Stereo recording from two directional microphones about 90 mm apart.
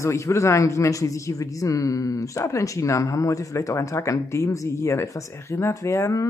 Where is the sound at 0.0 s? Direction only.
35° left (ahead or behind).